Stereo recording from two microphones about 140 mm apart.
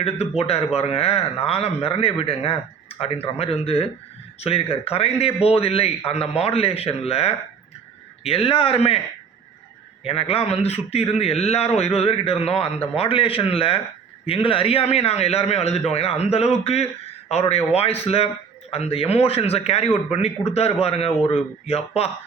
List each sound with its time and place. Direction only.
0.0 s a man's voice: 45° left (ahead or behind)
10.0 s a man's voice: 45° left (ahead or behind)